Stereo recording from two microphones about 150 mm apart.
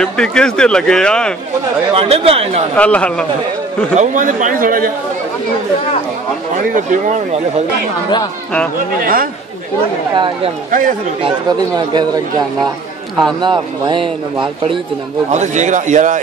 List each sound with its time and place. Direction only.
0.0 s speech: 5° left (ahead or behind)
2.0 s speech: 40° right (ahead or behind)
2.8 s speech: 10° left (ahead or behind)
3.9 s a man's voice: 55° right (ahead or behind)
6.7 s a man's voice: 55° right (ahead or behind)
9.0 s speech: 75° right (ahead or behind)
10.1 s speech: 30° right (ahead or behind)
10.7 s a man's voice: 60° right (ahead or behind)
11.2 s speech: 30° right (ahead or behind)
15.3 s a man's voice: 50° right (ahead or behind)